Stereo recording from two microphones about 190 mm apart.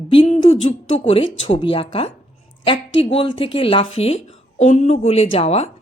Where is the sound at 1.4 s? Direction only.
30° left (ahead or behind).